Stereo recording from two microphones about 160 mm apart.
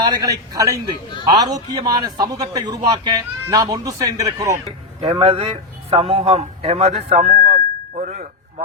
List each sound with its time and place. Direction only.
0.0 s a man's voice: 25° right (ahead or behind)
5.2 s a man's voice: 35° right (ahead or behind)
7.3 s a sound: 60° right (ahead or behind)